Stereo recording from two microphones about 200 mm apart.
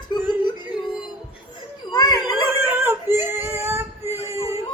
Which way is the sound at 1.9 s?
20° left (ahead or behind).